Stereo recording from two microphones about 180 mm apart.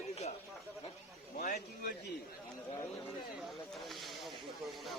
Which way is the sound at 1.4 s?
55° left (ahead or behind).